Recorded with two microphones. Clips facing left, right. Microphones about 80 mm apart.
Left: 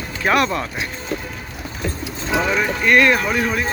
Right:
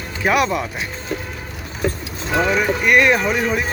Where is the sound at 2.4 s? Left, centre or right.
Centre.